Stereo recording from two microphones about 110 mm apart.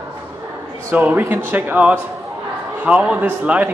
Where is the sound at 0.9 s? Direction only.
15° right (ahead or behind).